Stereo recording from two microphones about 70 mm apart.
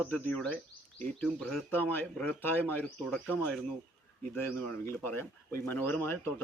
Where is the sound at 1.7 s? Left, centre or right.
Left.